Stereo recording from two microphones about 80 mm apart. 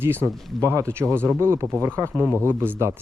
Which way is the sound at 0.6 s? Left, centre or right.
Right.